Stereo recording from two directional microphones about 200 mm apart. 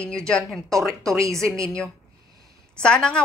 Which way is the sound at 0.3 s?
Centre (ahead or behind).